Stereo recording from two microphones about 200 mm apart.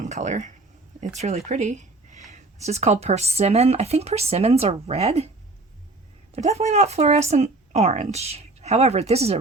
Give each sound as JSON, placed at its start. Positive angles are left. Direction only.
{"t": 0.0, "sound": "speech", "side_deg": -35}
{"t": 1.5, "sound": "a sound", "side_deg": -35}
{"t": 2.3, "sound": "speech", "side_deg": -35}
{"t": 6.3, "sound": "speech", "side_deg": -35}